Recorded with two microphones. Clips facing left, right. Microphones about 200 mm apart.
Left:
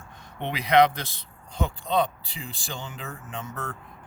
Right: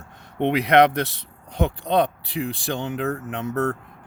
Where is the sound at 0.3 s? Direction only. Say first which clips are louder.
Right 4 dB; 65° right (ahead or behind).